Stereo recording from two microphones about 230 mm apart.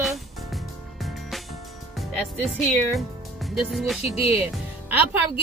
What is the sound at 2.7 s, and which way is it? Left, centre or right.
Speech, centre.